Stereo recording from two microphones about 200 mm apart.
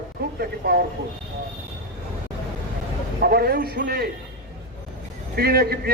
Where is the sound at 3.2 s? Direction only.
50° right (ahead or behind).